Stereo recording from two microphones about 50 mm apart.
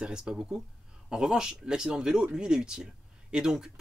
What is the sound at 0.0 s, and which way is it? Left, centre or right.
Speech, centre.